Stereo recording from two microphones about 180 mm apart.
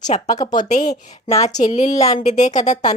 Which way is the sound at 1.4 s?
40° left (ahead or behind).